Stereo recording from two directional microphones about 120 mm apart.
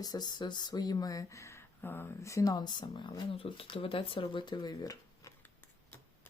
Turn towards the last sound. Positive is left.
turn(degrees=35)  # may be behind; listen again after turning